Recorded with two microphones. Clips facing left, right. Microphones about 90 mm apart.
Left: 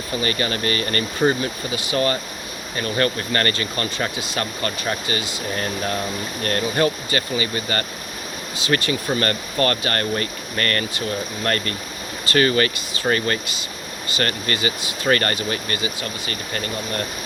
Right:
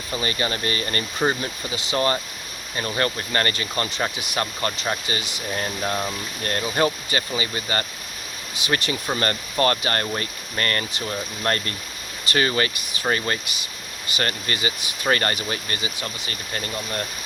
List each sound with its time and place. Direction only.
0.2 s speech: 25° right (ahead or behind)